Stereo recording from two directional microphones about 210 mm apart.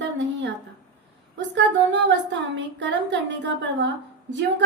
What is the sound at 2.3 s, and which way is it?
A woman's voice, 60° right (ahead or behind).